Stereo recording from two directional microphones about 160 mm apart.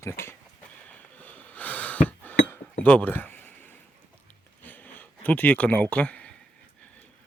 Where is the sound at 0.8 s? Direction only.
10° left (ahead or behind).